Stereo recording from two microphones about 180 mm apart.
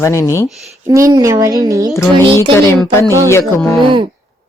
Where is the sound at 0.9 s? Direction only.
20° right (ahead or behind).